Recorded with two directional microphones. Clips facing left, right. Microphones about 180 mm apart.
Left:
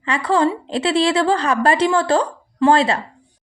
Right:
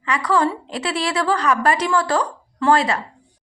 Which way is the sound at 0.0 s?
25° left (ahead or behind).